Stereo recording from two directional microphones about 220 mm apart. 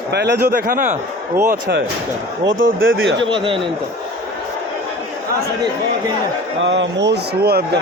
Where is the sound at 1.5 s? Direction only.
50° right (ahead or behind).